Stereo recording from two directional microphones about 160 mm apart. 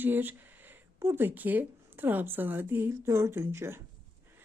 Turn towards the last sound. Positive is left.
turn(degrees=-15)  # may be behind; listen again after turning